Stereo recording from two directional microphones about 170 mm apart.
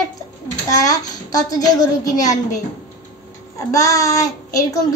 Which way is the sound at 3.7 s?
20° left (ahead or behind).